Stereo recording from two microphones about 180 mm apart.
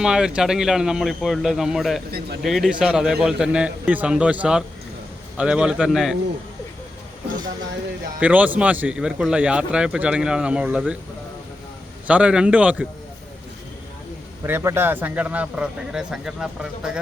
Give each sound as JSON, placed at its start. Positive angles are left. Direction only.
{"t": 0.0, "sound": "speech", "side_deg": -5}
{"t": 2.0, "sound": "speech", "side_deg": -60}
{"t": 2.4, "sound": "speech", "side_deg": 0}
{"t": 8.2, "sound": "speech", "side_deg": -10}
{"t": 12.0, "sound": "a man's voice", "side_deg": -5}
{"t": 14.4, "sound": "a man's voice", "side_deg": -15}